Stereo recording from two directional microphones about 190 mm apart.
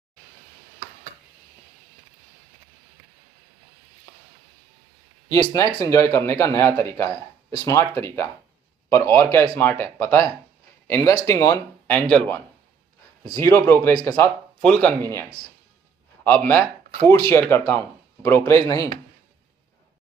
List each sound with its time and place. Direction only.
5.3 s a man's voice: 20° left (ahead or behind)
16.3 s speech: 10° left (ahead or behind)